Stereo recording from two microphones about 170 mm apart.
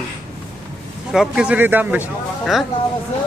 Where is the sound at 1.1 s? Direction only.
5° right (ahead or behind).